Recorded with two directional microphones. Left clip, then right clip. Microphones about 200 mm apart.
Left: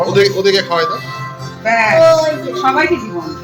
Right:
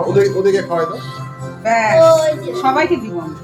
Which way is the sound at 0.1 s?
40° right (ahead or behind).